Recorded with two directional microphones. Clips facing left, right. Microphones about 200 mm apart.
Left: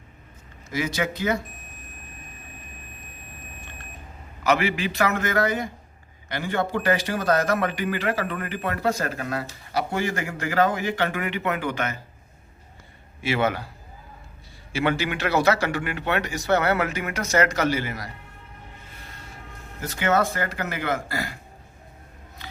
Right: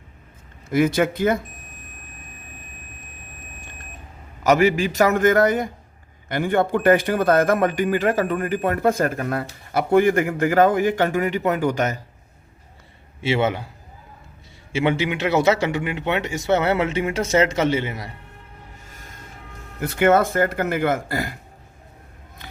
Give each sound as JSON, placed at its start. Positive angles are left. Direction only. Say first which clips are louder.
{"t": 0.7, "sound": "a man's voice", "louder": "right 8 dB", "side_deg": -55}
{"t": 4.4, "sound": "a man's voice", "louder": "right 6 dB", "side_deg": -45}
{"t": 13.2, "sound": "a man's voice", "louder": "right 3 dB", "side_deg": -25}
{"t": 14.7, "sound": "a man's voice", "louder": "right 3 dB", "side_deg": -20}
{"t": 18.9, "sound": "train", "louder": "right 1 dB", "side_deg": -45}
{"t": 19.8, "sound": "a man's voice", "louder": "right 6 dB", "side_deg": -55}